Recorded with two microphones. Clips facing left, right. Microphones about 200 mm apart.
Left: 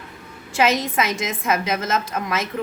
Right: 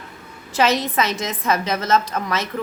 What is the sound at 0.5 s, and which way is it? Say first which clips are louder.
Speech: right 1 dB; 35° right (ahead or behind).